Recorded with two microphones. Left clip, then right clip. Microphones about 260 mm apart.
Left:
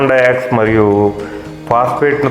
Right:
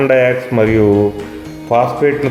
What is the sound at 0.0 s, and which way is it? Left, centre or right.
Speech, centre.